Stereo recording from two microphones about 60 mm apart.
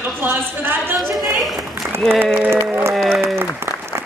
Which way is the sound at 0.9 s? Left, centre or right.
Centre.